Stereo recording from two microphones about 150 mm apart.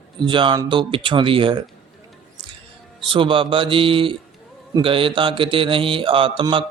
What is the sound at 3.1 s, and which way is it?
Speech, 35° right (ahead or behind).